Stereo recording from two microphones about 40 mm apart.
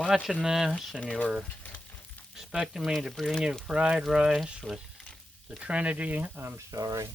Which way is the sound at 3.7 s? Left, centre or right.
Right.